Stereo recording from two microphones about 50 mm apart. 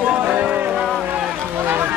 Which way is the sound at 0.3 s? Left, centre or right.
Right.